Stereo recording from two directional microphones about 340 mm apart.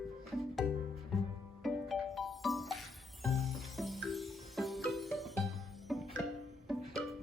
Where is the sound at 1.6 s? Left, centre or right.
Centre.